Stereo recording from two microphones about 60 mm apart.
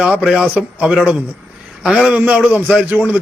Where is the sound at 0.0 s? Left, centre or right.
Centre.